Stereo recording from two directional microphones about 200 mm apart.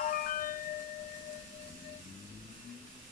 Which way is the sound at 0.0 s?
45° left (ahead or behind).